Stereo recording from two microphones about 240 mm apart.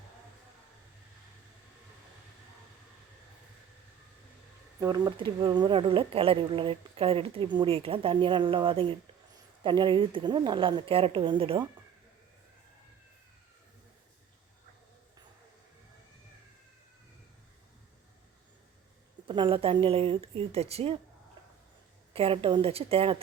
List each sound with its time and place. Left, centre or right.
4.8 s a woman's voice: centre
19.3 s a woman's voice: right
22.1 s a woman's voice: right